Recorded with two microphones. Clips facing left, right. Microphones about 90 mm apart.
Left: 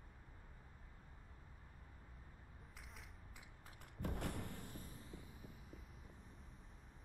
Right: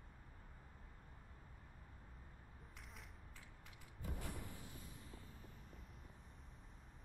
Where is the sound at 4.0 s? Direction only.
65° left (ahead or behind).